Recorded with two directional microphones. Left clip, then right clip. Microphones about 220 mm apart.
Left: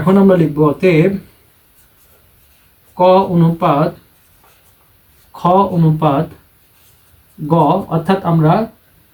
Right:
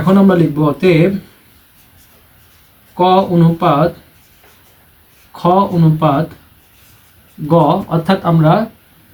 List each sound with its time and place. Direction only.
0.0 s speech: 15° left (ahead or behind)
3.0 s speech: 15° left (ahead or behind)
5.4 s speech: 15° left (ahead or behind)
7.4 s speech: 15° left (ahead or behind)